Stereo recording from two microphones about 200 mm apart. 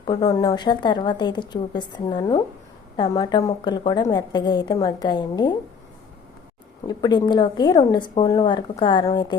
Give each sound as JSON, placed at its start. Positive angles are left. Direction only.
{"t": 0.0, "sound": "a woman's voice", "side_deg": 20}
{"t": 6.8, "sound": "a woman's voice", "side_deg": 20}